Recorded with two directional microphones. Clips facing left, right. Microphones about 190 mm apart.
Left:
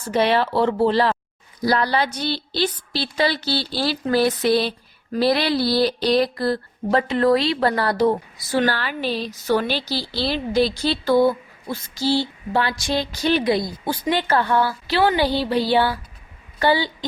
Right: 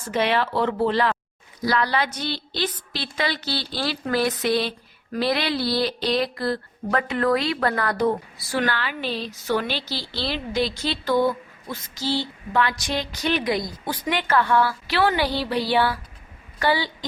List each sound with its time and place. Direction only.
0.1 s a woman's voice: 35° left (ahead or behind)